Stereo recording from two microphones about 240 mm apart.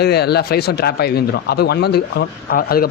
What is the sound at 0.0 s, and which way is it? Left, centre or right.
Speech, left.